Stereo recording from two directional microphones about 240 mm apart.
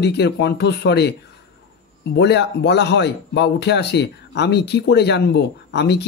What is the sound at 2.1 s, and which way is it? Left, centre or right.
Speech, left.